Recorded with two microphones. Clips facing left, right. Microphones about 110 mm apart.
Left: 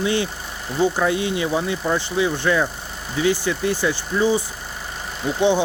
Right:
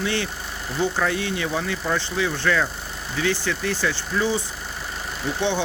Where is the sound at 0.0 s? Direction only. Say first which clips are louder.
Left 4 dB; 15° left (ahead or behind).